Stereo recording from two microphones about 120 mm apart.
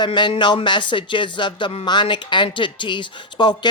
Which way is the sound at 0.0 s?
40° left (ahead or behind).